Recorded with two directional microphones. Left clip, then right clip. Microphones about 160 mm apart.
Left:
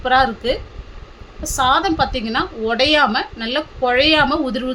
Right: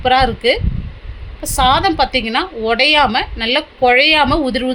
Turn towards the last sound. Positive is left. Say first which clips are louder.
# right 3 dB
turn(degrees=-15)  # may be behind; listen again after turning